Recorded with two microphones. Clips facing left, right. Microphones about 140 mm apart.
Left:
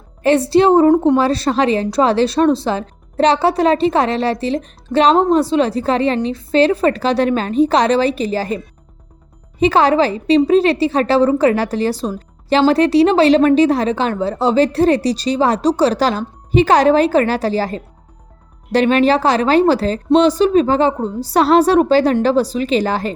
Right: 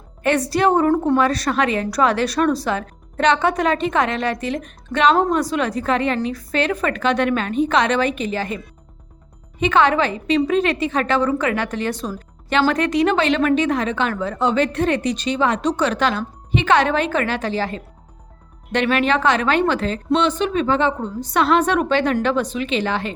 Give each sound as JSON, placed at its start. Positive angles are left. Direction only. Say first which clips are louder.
{"t": 0.2, "sound": "a woman's voice", "louder": "left 6 dB", "side_deg": 30}